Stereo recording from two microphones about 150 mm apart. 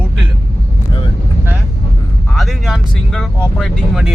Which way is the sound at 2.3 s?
Centre (ahead or behind).